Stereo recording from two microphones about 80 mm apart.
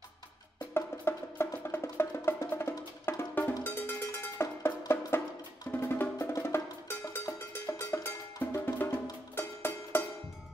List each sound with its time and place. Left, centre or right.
0.7 s music: left
3.1 s percussion: left
5.7 s music: left